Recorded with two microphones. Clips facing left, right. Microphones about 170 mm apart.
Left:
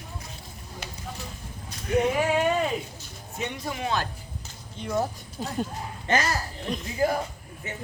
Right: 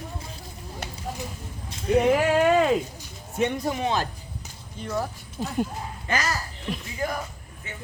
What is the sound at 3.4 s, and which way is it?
Speech, 50° right (ahead or behind).